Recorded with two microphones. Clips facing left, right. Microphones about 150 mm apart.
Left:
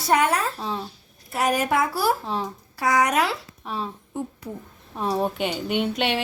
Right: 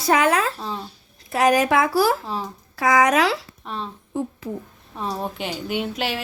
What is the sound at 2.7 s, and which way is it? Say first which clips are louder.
Speech: right 3 dB; 90° right.